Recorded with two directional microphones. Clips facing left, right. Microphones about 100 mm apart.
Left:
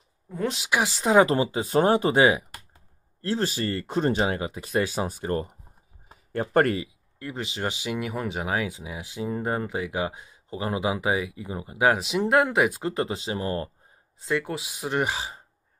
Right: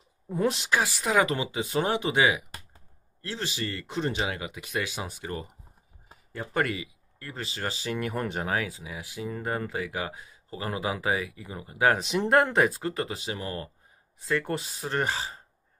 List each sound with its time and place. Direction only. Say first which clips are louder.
0.3 s speech: right 2 dB; 5° right (ahead or behind)
0.7 s speech: left 1 dB; 15° left (ahead or behind)
0.9 s speech: left 10 dB; 30° left (ahead or behind)
6.3 s speech: left 7 dB; 55° left (ahead or behind)
7.2 s speech: left 4 dB; 20° left (ahead or behind); by 8.5 s 5° left (ahead or behind)
8.5 s speech: left 2 dB; 20° left (ahead or behind)
12.0 s speech: left 1 dB; 5° left (ahead or behind)
12.7 s speech: left 4 dB; 25° left (ahead or behind)
14.4 s speech: even; 5° left (ahead or behind)